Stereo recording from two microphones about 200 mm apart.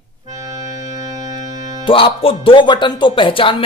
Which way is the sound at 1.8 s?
25° left (ahead or behind).